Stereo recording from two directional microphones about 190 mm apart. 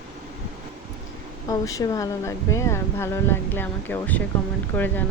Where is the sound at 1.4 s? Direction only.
20° left (ahead or behind).